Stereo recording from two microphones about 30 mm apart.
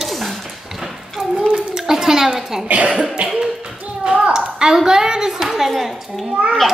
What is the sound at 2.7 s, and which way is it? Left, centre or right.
Speech, right.